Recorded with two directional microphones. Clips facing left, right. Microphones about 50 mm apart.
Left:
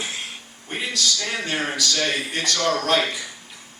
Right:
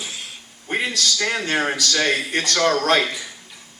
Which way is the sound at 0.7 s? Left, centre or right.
Right.